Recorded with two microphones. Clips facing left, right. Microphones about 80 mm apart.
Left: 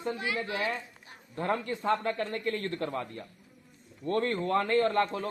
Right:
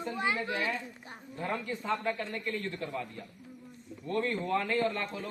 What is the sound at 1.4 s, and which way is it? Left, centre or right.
Speech, left.